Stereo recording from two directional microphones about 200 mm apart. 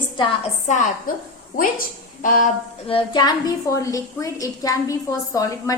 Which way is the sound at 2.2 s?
40° left (ahead or behind).